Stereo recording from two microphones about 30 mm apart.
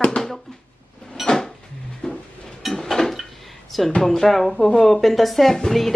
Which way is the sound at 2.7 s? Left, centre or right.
Centre.